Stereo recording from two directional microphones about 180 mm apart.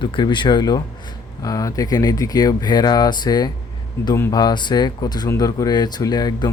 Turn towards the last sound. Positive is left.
turn(degrees=20)  # may be behind; listen again after turning